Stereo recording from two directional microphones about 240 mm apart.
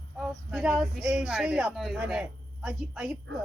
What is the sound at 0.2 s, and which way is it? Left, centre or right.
Speech, centre.